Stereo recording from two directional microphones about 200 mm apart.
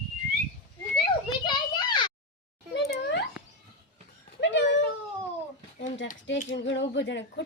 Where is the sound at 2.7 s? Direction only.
60° left (ahead or behind).